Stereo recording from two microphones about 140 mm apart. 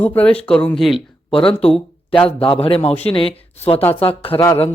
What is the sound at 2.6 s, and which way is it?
Speech, 45° left (ahead or behind).